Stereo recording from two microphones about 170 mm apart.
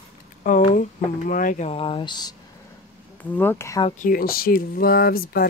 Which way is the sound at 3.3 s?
15° left (ahead or behind).